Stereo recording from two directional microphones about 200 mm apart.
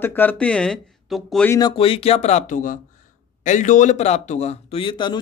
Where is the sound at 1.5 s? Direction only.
20° left (ahead or behind).